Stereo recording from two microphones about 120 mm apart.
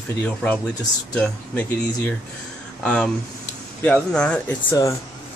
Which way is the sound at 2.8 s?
10° left (ahead or behind).